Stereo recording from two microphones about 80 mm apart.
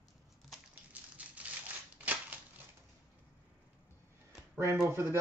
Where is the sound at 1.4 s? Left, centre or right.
Centre.